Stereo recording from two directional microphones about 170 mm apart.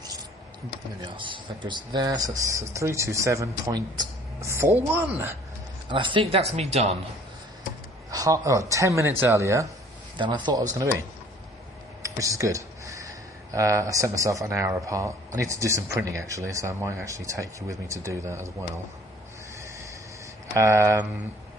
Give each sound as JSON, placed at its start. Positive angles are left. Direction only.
{"t": 1.0, "sound": "speech", "side_deg": -30}
{"t": 5.9, "sound": "speech", "side_deg": -30}
{"t": 8.1, "sound": "speech", "side_deg": -20}
{"t": 12.0, "sound": "speech", "side_deg": -20}
{"t": 20.5, "sound": "speech", "side_deg": -20}